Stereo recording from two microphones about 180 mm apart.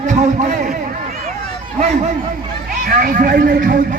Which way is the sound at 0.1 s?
40° right (ahead or behind).